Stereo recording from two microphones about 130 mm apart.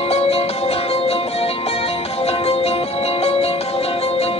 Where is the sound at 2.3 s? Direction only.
55° left (ahead or behind).